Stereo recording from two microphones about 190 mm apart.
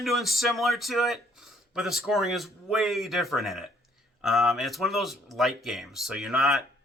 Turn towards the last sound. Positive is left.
turn(degrees=0)  # may be behind; listen again after turning